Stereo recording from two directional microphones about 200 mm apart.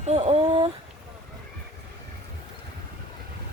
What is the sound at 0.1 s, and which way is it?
Speech, 35° right (ahead or behind).